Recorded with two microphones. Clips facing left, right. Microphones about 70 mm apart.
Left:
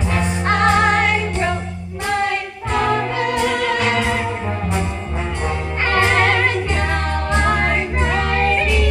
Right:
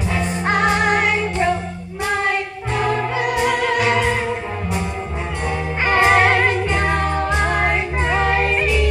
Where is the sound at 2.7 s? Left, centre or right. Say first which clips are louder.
Left 2 dB; centre.